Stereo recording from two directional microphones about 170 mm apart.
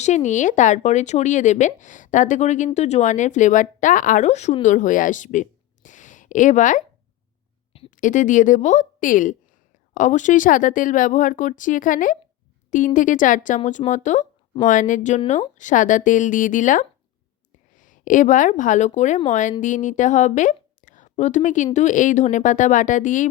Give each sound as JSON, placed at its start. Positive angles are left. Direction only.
{"t": 0.0, "sound": "a woman's voice", "side_deg": 45}
{"t": 7.9, "sound": "a woman's voice", "side_deg": 50}